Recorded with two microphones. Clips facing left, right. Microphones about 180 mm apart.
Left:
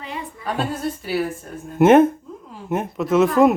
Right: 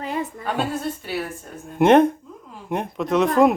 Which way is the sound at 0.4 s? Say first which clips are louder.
Left 3 dB; centre (ahead or behind).